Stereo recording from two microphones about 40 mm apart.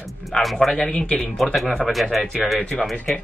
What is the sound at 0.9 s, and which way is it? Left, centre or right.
Speech, left.